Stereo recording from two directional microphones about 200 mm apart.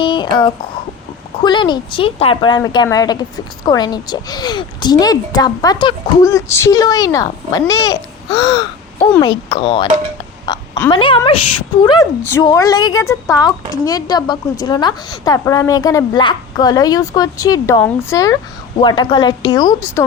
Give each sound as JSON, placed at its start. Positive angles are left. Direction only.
{"t": 0.0, "sound": "a woman's voice", "side_deg": 25}
{"t": 10.5, "sound": "oink", "side_deg": 20}
{"t": 10.8, "sound": "a woman's voice", "side_deg": 25}